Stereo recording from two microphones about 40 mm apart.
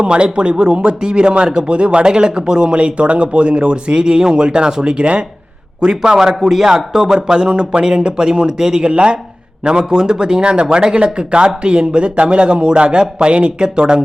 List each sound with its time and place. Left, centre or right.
0.0 s speech: right
5.9 s a man's voice: centre
6.9 s a man's voice: centre